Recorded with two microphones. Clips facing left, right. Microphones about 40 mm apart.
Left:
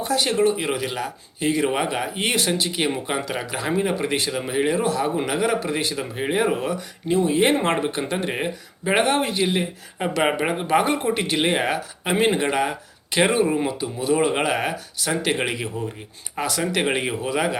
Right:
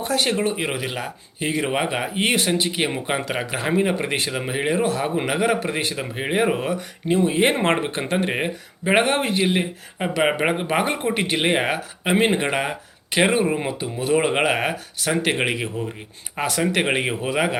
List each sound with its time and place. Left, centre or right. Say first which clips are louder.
0.0 s a man's voice: right 1 dB; right
0.3 s speech: left 3 dB; right
4.3 s a man's voice: left 1 dB; right
8.1 s speech: right 2 dB; right
10.0 s speech: right 1 dB; centre
10.3 s speech: left 1 dB; right
14.0 s a man's voice: right 1 dB; right